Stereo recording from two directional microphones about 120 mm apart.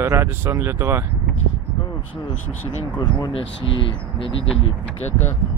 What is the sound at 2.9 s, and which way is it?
Speech, 45° left (ahead or behind).